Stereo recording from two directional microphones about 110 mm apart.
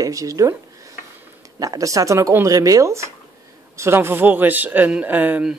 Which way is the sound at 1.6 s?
30° right (ahead or behind).